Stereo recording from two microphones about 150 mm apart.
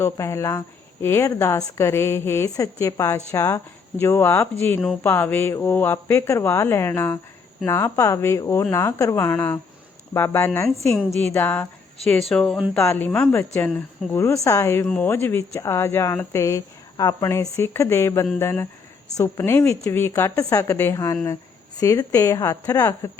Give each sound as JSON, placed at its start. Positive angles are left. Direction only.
{"t": 0.0, "sound": "speech", "side_deg": 20}
{"t": 12.8, "sound": "speech", "side_deg": 15}